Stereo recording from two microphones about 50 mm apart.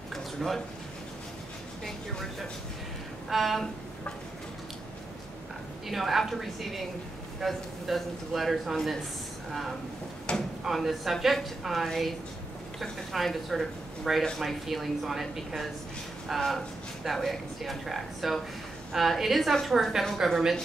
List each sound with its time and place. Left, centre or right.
0.1 s a sound: centre
3.3 s a woman's voice: centre
5.9 s a woman's voice: centre
10.3 s drawer open or close: centre
10.6 s a woman's voice: centre
13.1 s a woman's voice: centre